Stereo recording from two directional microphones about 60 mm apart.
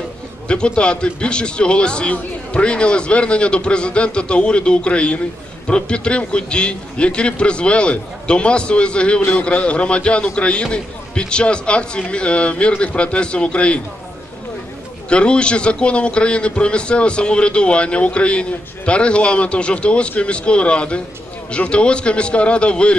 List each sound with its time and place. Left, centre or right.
0.5 s a man's voice: centre
15.0 s a man's voice: centre